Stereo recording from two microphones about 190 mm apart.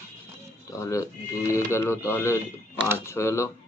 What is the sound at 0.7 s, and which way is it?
Speech, 15° left (ahead or behind).